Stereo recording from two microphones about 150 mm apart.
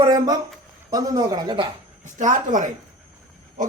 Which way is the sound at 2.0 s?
60° right (ahead or behind).